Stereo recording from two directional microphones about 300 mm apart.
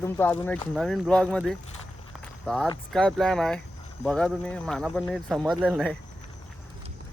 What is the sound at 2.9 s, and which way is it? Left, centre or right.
Speech, centre.